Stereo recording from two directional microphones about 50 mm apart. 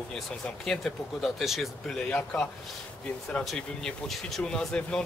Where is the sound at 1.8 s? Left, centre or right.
Centre.